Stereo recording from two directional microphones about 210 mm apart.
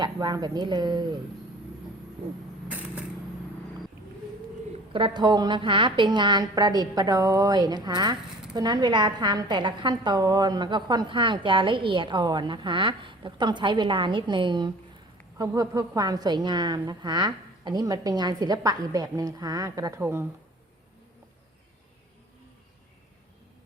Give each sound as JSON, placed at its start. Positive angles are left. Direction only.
{"t": 0.0, "sound": "a woman's voice", "side_deg": -20}
{"t": 2.6, "sound": "a sound", "side_deg": -5}
{"t": 4.9, "sound": "a woman's voice", "side_deg": -20}